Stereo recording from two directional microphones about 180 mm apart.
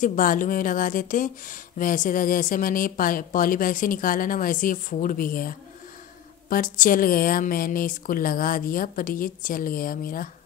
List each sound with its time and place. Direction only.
0.0 s speech: 50° left (ahead or behind)